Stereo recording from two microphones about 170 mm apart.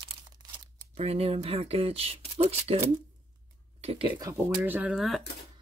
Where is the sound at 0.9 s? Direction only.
35° right (ahead or behind).